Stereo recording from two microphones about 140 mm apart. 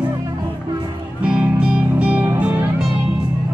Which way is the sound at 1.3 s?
10° right (ahead or behind).